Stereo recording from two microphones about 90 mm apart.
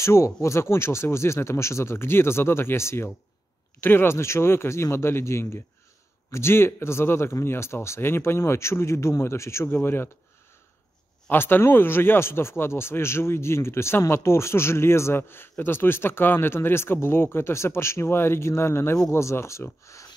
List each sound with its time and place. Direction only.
0.0 s speech: 30° left (ahead or behind)
11.2 s speech: 25° left (ahead or behind)